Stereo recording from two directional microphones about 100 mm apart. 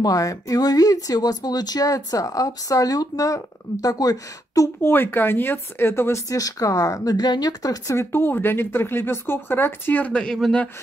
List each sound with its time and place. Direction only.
0.0 s speech: 35° left (ahead or behind)
4.8 s speech: 20° left (ahead or behind)